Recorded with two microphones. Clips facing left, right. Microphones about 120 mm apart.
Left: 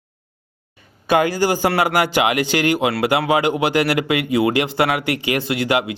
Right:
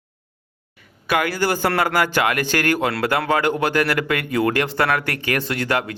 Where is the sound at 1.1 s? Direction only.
20° left (ahead or behind).